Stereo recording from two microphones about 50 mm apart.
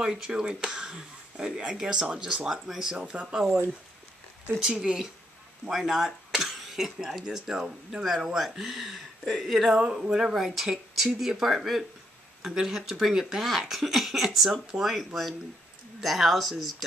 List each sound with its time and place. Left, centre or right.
0.0 s speech: centre
4.6 s speech: centre
9.8 s speech: centre
16.0 s speech: centre